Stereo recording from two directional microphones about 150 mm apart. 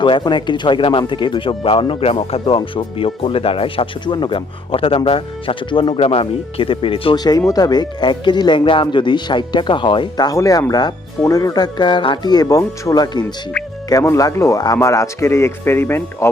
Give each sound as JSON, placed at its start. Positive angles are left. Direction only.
{"t": 0.0, "sound": "speech", "side_deg": 30}
{"t": 7.3, "sound": "speech", "side_deg": 25}